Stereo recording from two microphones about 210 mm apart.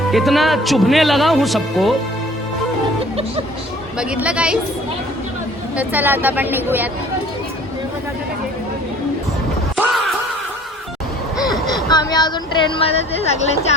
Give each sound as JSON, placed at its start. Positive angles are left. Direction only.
{"t": 0.1, "sound": "speech", "side_deg": 0}
{"t": 3.9, "sound": "speech", "side_deg": -5}
{"t": 5.7, "sound": "a woman's voice", "side_deg": -10}
{"t": 9.7, "sound": "a sound", "side_deg": 0}
{"t": 11.3, "sound": "vehicle", "side_deg": 0}
{"t": 11.7, "sound": "speech", "side_deg": 20}